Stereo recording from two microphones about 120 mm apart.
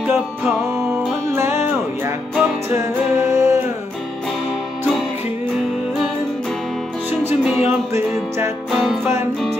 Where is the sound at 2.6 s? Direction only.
20° right (ahead or behind).